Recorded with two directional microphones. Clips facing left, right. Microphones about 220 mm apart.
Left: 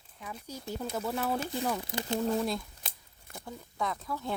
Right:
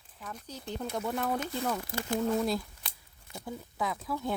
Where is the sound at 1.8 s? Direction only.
20° left (ahead or behind).